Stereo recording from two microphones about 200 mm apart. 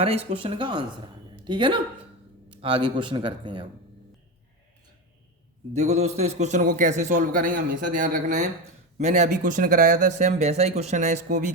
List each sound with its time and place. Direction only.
0.0 s speech: 30° right (ahead or behind)
5.7 s speech: 35° right (ahead or behind)